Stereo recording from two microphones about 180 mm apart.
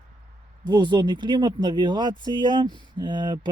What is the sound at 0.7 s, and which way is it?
Speech, 25° right (ahead or behind).